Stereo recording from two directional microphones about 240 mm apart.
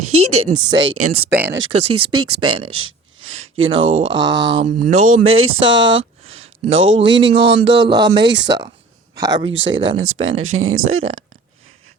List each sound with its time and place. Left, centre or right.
0.0 s speech: right
0.5 s speech: centre
0.9 s speech: right
1.5 s speech: right
4.1 s speech: centre
4.4 s speech: right
4.9 s speech: right
7.9 s speech: centre
8.3 s speech: right
9.1 s speech: centre
9.4 s speech: right